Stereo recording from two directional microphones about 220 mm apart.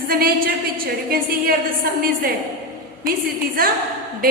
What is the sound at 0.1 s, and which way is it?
A woman's voice, 45° right (ahead or behind).